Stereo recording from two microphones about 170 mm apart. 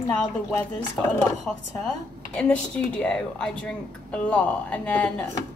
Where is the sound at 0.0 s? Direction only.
15° left (ahead or behind).